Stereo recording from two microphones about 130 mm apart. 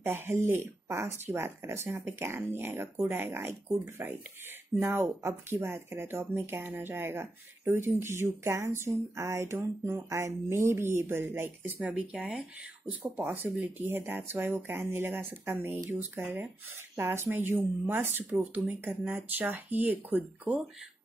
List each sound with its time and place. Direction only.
0.0 s speech: 15° right (ahead or behind)